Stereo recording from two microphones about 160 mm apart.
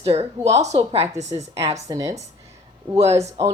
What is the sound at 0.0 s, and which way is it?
A woman's voice, 40° right (ahead or behind).